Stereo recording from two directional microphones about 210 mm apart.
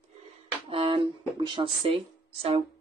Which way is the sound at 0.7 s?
25° right (ahead or behind).